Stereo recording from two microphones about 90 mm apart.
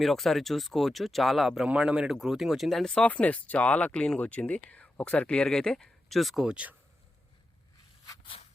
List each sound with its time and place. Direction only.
0.0 s speech: centre (ahead or behind)
1.6 s speech: 10° right (ahead or behind)
8.3 s a sound: 90° left